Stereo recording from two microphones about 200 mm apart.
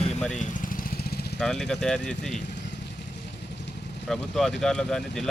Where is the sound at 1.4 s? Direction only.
5° left (ahead or behind).